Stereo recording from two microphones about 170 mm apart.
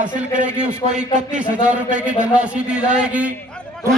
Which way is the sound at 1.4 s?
5° right (ahead or behind).